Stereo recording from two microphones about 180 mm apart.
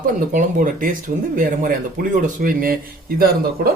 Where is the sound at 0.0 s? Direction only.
50° right (ahead or behind).